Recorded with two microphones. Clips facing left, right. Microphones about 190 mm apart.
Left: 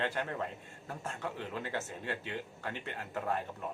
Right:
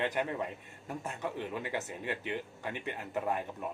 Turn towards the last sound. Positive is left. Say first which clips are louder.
# right 2 dB
turn(degrees=-15)  # may be behind; listen again after turning